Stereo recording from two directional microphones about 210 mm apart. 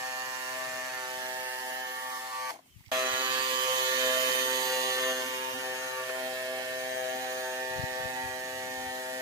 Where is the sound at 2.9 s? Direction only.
20° right (ahead or behind).